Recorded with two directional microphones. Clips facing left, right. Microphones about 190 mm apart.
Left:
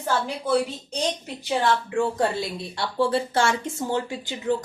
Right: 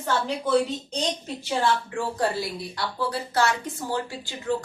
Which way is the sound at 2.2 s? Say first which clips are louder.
Left 1 dB; 25° left (ahead or behind).